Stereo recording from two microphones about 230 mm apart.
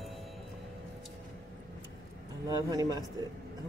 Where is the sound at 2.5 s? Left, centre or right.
Centre.